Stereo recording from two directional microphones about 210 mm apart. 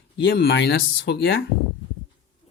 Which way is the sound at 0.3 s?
55° left (ahead or behind).